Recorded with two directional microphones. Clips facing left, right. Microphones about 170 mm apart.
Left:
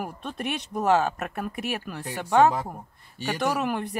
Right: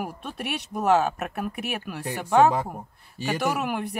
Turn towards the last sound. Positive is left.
turn(degrees=-5)  # may be behind; listen again after turning